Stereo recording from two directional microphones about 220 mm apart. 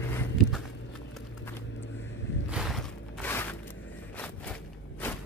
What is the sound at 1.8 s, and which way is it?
Vehicle, 55° left (ahead or behind).